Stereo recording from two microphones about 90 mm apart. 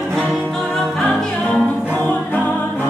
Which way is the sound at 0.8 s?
10° left (ahead or behind).